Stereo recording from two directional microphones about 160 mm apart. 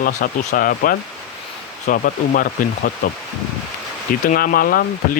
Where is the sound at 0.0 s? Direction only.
60° left (ahead or behind).